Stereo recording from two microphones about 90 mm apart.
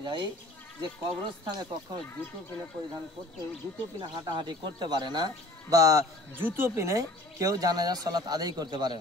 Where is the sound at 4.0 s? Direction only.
65° right (ahead or behind); by 6.0 s 40° right (ahead or behind).